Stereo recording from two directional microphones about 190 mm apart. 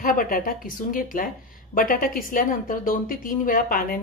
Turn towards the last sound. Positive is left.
turn(degrees=45)  # may be behind; listen again after turning